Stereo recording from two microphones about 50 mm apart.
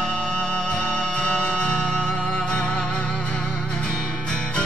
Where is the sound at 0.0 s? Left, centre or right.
Left.